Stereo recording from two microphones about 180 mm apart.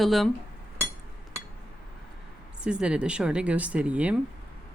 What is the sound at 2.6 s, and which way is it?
A woman's voice, 5° right (ahead or behind).